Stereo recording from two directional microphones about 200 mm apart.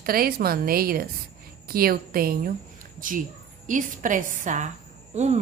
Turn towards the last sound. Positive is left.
turn(degrees=-35)  # may be behind; listen again after turning